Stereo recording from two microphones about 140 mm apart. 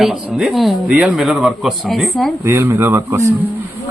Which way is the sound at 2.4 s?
20° right (ahead or behind).